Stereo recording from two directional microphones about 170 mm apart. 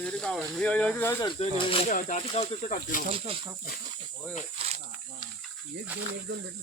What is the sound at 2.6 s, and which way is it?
Speech, 50° left (ahead or behind).